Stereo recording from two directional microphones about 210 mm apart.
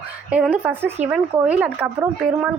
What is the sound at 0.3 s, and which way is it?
A woman's voice, 5° right (ahead or behind).